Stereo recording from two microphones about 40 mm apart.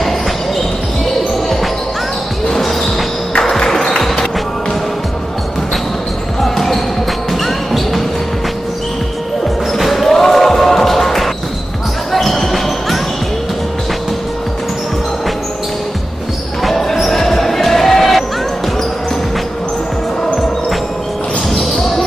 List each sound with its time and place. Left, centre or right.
2.5 s basketball bounce: centre
3.4 s music: centre
6.4 s basketball bounce: centre
7.4 s music: centre
9.8 s basketball bounce: centre
16.6 s basketball bounce: centre